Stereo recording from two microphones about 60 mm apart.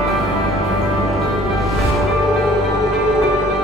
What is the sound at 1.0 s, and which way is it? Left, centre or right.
Music, centre.